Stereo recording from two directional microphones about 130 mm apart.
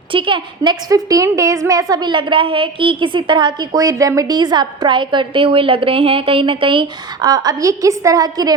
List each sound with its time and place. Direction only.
0.1 s a woman's voice: 40° right (ahead or behind)